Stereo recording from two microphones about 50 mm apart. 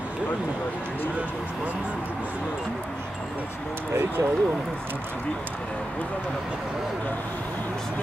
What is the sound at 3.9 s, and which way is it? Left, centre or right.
Speech, right.